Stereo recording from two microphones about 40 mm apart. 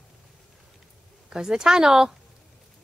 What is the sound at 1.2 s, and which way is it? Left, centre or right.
Speech, centre.